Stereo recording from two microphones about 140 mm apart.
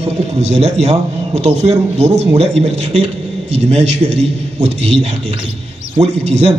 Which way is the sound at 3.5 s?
45° right (ahead or behind).